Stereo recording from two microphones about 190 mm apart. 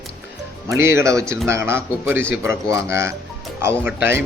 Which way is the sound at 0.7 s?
15° right (ahead or behind).